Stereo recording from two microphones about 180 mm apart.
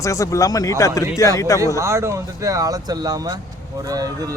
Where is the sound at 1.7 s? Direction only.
15° right (ahead or behind).